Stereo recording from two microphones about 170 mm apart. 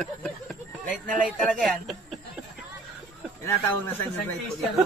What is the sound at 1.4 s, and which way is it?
Speech, centre (ahead or behind).